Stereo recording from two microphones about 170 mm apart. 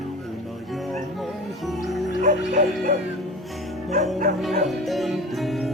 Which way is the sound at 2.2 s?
45° right (ahead or behind).